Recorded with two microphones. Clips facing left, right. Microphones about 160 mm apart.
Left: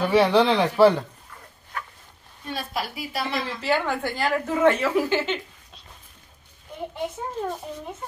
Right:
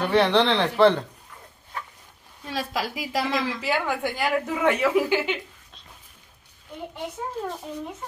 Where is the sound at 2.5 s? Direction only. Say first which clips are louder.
Right 2 dB; 90° right.